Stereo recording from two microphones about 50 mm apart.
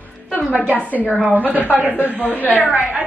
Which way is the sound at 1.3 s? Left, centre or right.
Right.